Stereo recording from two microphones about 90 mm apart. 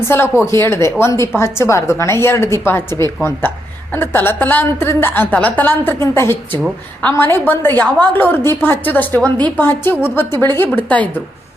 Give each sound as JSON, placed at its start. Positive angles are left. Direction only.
{"t": 0.0, "sound": "a woman's voice", "side_deg": 30}